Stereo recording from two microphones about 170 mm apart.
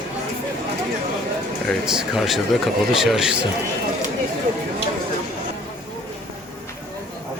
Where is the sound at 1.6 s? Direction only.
5° right (ahead or behind).